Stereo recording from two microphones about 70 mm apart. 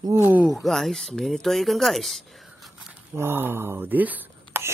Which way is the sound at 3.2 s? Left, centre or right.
Right.